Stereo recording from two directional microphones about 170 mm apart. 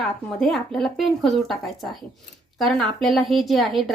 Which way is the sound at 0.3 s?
Centre (ahead or behind).